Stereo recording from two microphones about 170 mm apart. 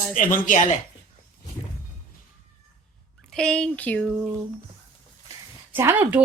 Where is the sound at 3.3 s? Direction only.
5° left (ahead or behind).